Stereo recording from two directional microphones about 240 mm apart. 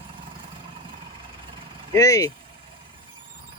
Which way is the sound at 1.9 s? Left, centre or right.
Centre.